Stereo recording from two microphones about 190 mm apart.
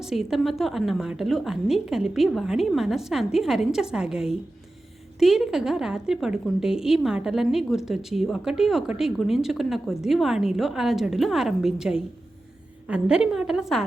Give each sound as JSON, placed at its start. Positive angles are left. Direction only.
{"t": 0.0, "sound": "a woman's voice", "side_deg": 0}